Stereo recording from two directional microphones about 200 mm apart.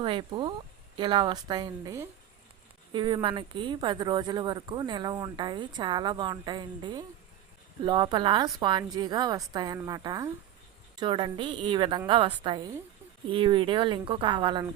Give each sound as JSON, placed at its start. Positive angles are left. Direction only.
{"t": 0.0, "sound": "speech", "side_deg": -25}